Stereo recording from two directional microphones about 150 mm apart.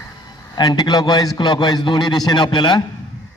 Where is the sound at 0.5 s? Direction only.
25° left (ahead or behind).